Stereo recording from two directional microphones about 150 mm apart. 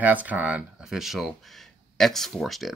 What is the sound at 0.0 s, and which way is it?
Speech, 10° right (ahead or behind).